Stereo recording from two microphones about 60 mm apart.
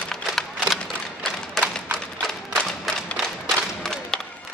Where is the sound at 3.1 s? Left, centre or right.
Centre.